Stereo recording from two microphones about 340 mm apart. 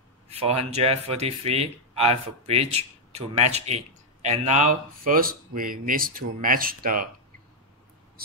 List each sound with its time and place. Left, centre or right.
0.3 s speech: centre